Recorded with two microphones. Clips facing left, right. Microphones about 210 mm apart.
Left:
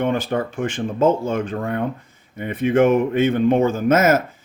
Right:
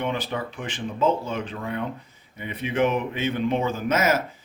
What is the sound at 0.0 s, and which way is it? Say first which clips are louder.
Speech: left 7 dB; 50° left (ahead or behind).